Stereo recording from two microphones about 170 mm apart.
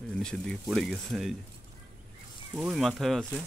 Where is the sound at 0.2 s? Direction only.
5° left (ahead or behind).